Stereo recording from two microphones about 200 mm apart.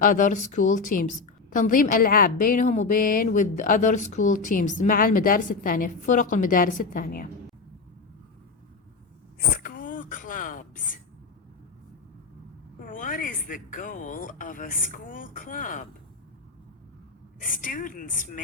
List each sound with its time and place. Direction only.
0.0 s a woman's voice: 40° left (ahead or behind)
9.6 s a sound: 40° left (ahead or behind)
12.8 s speech: 40° left (ahead or behind)
17.4 s a woman's voice: 40° left (ahead or behind)